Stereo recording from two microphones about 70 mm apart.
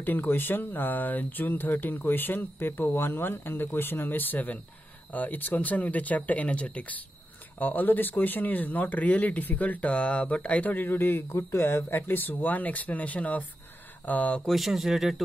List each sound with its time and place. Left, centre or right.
0.0 s speech: left
14.5 s speech: centre